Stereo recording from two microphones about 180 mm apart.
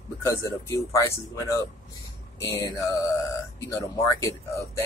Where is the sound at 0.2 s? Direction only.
15° left (ahead or behind).